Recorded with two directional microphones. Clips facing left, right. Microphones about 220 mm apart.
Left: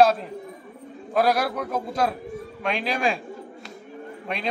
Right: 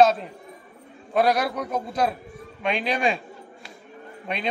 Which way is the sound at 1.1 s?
Centre (ahead or behind).